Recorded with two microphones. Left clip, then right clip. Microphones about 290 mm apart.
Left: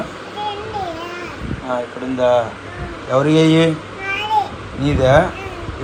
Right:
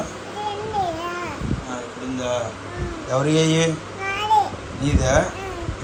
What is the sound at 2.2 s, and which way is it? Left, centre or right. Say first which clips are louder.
A man's voice: left 10 dB; centre.